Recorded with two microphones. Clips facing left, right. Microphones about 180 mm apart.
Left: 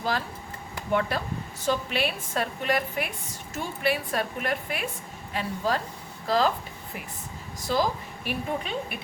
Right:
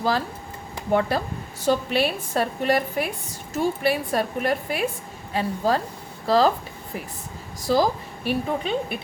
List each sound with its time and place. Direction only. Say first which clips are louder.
0.9 s a woman's voice: right 5 dB; 35° right (ahead or behind)
7.6 s a woman's voice: right 5 dB; 35° right (ahead or behind)